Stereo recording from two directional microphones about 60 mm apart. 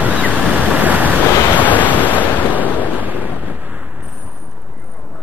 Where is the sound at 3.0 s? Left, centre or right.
Right.